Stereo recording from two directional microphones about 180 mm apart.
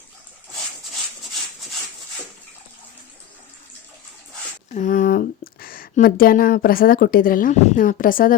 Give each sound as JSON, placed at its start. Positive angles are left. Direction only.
{"t": 4.7, "sound": "speech", "side_deg": 45}